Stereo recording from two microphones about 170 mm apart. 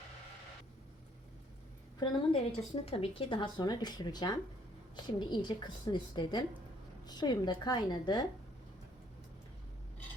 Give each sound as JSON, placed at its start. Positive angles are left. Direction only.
{"t": 2.0, "sound": "speech", "side_deg": 25}